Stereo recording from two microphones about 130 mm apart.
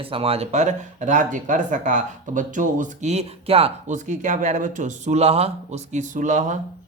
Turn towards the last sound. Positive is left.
turn(degrees=-75)  # may be behind; listen again after turning